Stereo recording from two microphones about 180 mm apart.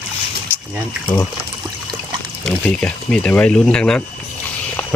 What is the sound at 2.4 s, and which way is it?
Speech, 5° left (ahead or behind).